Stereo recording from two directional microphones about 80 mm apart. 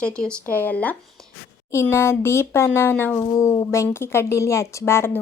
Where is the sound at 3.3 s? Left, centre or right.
Left.